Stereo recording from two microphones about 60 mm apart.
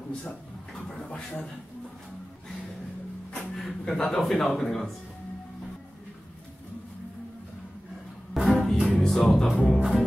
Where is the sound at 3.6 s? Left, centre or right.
Centre.